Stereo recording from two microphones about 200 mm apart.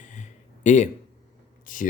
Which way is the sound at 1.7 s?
40° left (ahead or behind).